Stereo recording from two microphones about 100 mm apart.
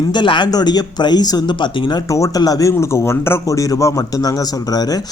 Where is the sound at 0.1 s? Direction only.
50° left (ahead or behind).